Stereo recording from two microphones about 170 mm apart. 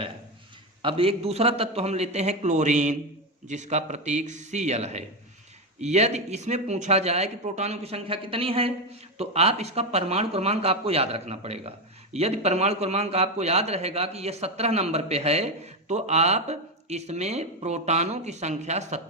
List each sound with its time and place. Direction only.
0.8 s a man's voice: 30° right (ahead or behind)